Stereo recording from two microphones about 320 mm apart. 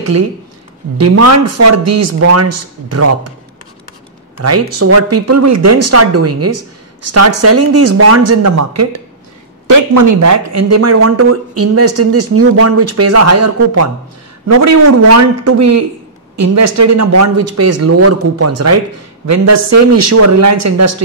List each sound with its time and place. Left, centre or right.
0.0 s speech: right
4.4 s speech: right
9.7 s a man's voice: right